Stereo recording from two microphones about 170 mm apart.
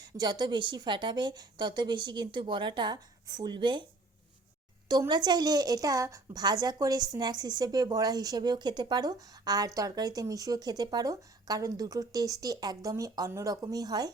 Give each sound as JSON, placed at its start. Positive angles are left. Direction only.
{"t": 0.0, "sound": "a woman's voice", "side_deg": -25}
{"t": 4.9, "sound": "a woman's voice", "side_deg": -25}